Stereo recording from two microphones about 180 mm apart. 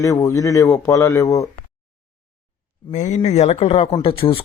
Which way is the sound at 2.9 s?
40° left (ahead or behind).